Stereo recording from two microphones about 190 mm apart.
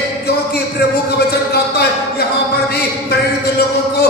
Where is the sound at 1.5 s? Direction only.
55° left (ahead or behind).